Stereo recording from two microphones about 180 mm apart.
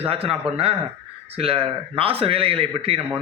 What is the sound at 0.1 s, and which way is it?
A man's voice, 30° right (ahead or behind).